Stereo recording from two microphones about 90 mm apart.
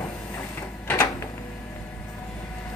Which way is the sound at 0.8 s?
20° left (ahead or behind).